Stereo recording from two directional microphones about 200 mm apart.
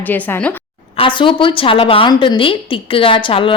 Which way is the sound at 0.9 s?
25° left (ahead or behind).